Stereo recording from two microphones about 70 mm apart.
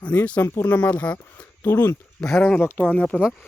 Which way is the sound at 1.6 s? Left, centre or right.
Left.